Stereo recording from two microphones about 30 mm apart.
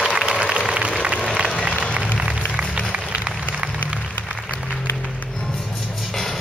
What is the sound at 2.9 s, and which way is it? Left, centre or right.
Applause, right.